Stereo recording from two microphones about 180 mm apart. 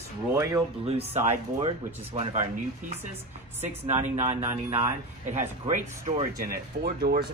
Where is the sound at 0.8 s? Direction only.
35° right (ahead or behind).